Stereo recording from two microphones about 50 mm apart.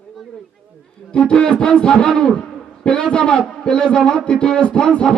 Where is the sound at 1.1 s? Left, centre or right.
Left.